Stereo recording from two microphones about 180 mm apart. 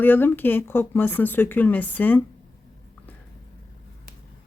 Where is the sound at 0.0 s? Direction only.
10° left (ahead or behind).